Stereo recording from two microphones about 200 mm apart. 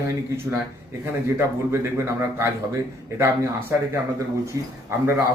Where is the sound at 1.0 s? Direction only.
10° right (ahead or behind).